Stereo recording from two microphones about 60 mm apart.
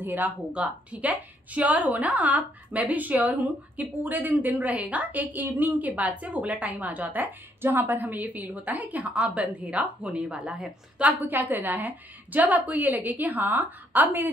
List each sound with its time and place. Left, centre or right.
0.0 s speech: right
0.5 s a woman's voice: right
11.0 s a woman's voice: right